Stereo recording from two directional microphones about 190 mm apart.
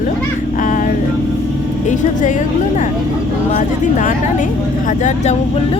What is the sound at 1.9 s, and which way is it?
Speech, 40° left (ahead or behind).